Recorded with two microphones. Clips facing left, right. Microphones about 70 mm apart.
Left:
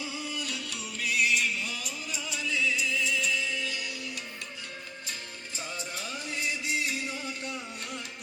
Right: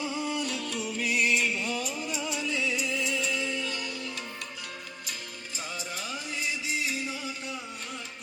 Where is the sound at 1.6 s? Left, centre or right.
Centre.